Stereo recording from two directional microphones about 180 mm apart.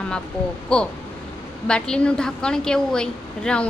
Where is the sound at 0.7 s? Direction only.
5° left (ahead or behind).